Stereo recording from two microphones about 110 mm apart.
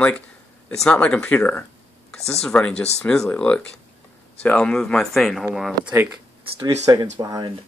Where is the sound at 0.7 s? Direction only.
10° left (ahead or behind).